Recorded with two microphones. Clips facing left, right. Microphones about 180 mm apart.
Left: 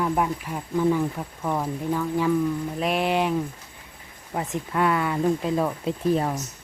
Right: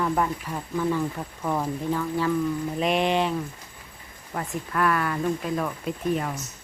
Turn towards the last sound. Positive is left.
turn(degrees=35)  # may be behind; listen again after turning